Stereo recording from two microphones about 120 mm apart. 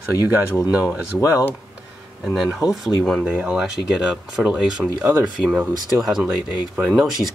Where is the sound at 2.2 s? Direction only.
5° right (ahead or behind).